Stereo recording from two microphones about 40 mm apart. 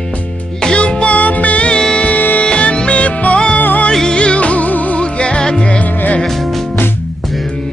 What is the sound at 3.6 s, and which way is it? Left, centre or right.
Music, left.